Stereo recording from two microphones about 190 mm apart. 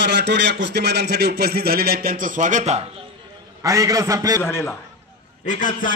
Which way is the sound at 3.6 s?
15° right (ahead or behind).